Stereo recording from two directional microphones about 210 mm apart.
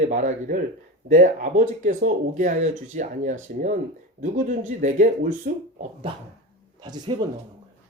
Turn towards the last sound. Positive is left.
turn(degrees=-20)  # may be behind; listen again after turning